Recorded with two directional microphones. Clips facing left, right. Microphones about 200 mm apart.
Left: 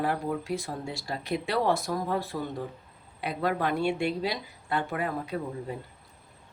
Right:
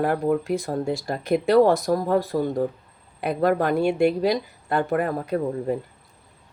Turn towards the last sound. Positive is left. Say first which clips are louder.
# right 9 dB
turn(degrees=-50)  # may be behind; listen again after turning